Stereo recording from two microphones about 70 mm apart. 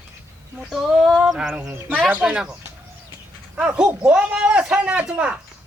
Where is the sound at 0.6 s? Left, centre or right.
Centre.